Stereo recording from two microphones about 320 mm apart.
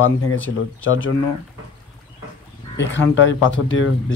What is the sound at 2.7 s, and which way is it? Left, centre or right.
A man's voice, left.